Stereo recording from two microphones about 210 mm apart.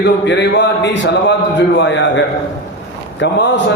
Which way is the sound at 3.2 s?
55° left (ahead or behind).